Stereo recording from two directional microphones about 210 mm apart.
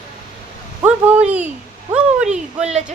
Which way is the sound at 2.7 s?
35° right (ahead or behind).